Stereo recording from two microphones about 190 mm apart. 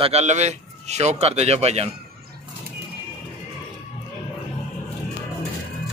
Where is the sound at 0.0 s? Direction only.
35° right (ahead or behind).